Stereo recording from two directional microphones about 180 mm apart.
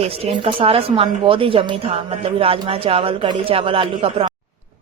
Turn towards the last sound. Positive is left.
turn(degrees=-30)  # may be behind; listen again after turning